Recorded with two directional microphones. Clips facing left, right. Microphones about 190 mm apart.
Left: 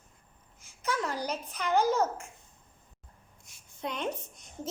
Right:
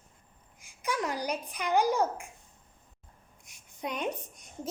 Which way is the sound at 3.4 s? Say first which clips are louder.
Even; 15° right (ahead or behind).